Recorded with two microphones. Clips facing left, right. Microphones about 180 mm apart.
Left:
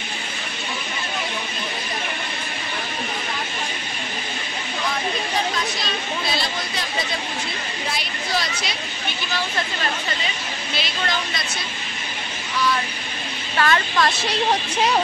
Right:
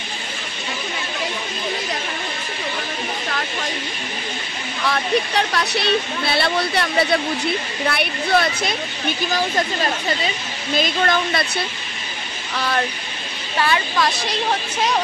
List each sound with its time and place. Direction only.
4.8 s speech: 70° right (ahead or behind)
10.7 s speech: 50° right (ahead or behind)
13.6 s a woman's voice: 10° right (ahead or behind)